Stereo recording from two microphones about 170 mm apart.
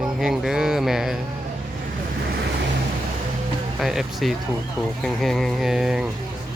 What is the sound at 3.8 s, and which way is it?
Speech, centre (ahead or behind).